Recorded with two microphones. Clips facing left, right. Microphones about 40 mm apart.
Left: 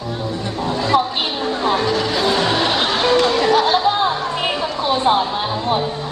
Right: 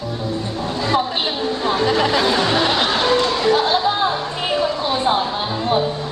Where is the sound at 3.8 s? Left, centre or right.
Centre.